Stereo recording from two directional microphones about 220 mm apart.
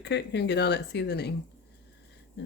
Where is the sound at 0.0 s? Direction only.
50° left (ahead or behind).